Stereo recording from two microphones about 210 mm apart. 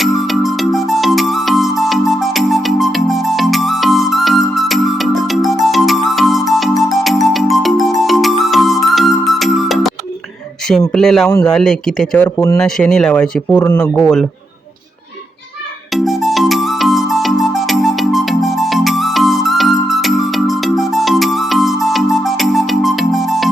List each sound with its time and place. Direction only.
0.0 s music: centre (ahead or behind)
10.7 s speech: centre (ahead or behind)
11.3 s speech: 15° left (ahead or behind)
11.5 s speech: 5° left (ahead or behind)
15.9 s music: centre (ahead or behind)